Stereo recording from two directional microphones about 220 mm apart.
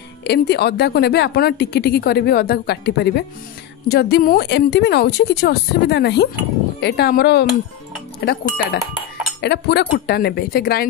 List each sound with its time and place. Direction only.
0.2 s a woman's voice: 50° left (ahead or behind)